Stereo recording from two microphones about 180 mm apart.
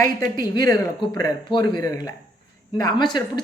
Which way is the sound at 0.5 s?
20° left (ahead or behind).